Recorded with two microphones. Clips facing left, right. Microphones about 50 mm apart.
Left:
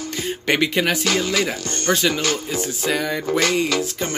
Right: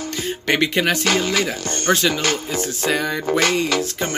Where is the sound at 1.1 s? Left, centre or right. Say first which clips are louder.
Right 1 dB; right.